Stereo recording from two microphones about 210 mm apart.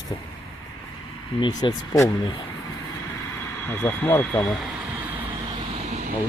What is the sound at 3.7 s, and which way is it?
Speech, 10° left (ahead or behind).